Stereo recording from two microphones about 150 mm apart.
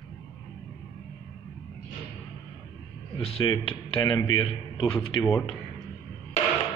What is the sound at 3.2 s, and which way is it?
Speech, 40° left (ahead or behind).